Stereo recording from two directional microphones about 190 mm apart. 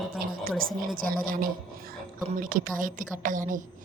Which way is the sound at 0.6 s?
50° right (ahead or behind).